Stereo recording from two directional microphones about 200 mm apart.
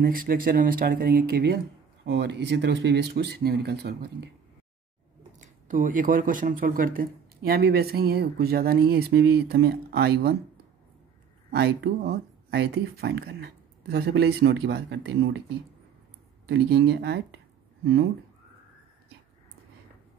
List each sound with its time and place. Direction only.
0.0 s speech: 45° right (ahead or behind)
5.4 s speech: 40° right (ahead or behind)
11.5 s speech: 55° right (ahead or behind)
16.4 s speech: 60° right (ahead or behind)